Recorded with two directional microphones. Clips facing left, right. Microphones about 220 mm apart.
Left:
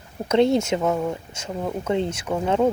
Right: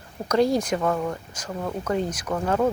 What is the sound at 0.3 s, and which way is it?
Speech, 25° left (ahead or behind).